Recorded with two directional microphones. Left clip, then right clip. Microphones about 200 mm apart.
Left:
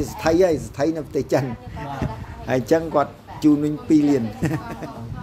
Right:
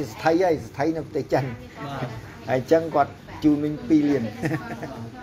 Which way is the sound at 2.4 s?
40° left (ahead or behind).